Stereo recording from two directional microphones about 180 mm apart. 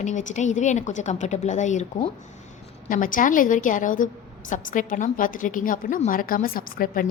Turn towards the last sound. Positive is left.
turn(degrees=55)  # may be behind; listen again after turning